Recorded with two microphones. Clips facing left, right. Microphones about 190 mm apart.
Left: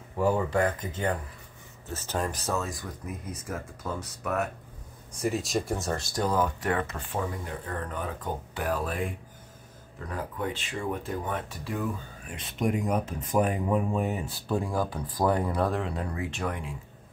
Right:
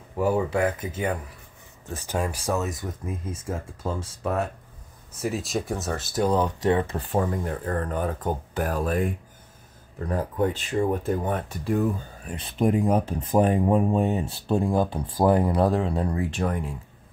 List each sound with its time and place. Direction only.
0.2 s speech: 10° right (ahead or behind); by 4.5 s 30° right (ahead or behind)
5.2 s speech: centre (ahead or behind)
6.3 s speech: 25° right (ahead or behind)
7.1 s speech: 45° right (ahead or behind)
12.3 s speech: 35° right (ahead or behind)